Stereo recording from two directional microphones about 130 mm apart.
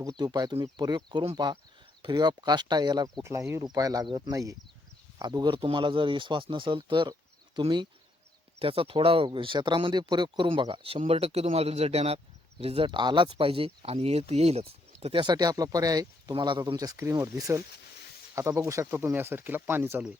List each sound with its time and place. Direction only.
0.0 s speech: 30° right (ahead or behind)
3.2 s speech: 20° right (ahead or behind)
5.5 s speech: 45° right (ahead or behind)
15.0 s speech: 40° right (ahead or behind); by 20.0 s 20° right (ahead or behind)